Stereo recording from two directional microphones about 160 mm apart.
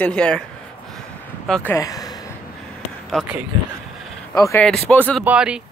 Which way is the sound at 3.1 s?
10° right (ahead or behind).